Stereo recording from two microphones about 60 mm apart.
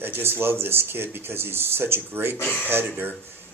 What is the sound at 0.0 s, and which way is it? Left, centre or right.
Speech, right.